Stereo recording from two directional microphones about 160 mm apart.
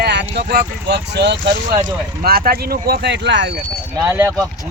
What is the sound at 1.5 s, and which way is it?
Speech, 55° right (ahead or behind).